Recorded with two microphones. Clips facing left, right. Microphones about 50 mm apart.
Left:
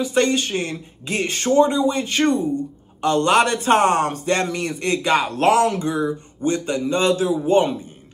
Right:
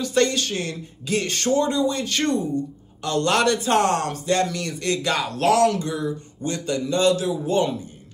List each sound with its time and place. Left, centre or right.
0.0 s a man's voice: centre